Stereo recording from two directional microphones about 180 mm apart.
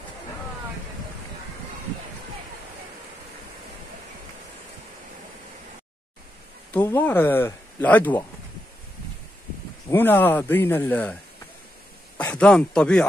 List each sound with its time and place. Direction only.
6.7 s speech: 10° left (ahead or behind)
9.8 s speech: 10° left (ahead or behind)
12.2 s speech: 5° left (ahead or behind)